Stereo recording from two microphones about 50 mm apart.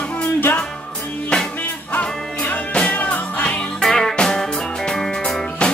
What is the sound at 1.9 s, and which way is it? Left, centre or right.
Music, left.